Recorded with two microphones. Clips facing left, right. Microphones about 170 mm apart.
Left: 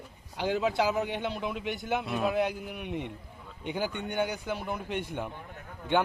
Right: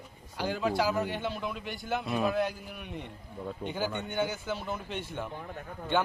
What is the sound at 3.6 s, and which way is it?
Speech, 60° right (ahead or behind).